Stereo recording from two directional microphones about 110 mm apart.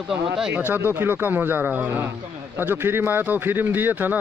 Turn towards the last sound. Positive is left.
turn(degrees=-15)  # may be behind; listen again after turning